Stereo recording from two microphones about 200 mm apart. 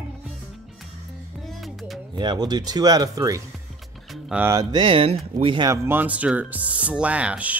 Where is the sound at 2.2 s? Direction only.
20° right (ahead or behind).